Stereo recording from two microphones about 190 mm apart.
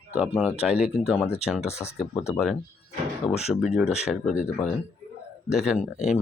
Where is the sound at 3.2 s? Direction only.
35° left (ahead or behind).